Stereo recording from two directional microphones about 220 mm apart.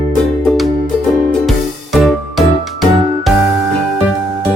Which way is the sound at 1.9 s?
Centre (ahead or behind).